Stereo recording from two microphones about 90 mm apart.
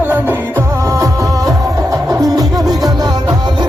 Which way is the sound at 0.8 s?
35° right (ahead or behind).